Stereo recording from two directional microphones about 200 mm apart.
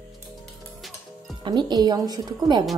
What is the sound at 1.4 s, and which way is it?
A woman's voice, 20° right (ahead or behind).